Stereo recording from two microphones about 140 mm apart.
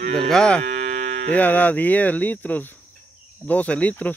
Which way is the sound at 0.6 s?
60° right (ahead or behind).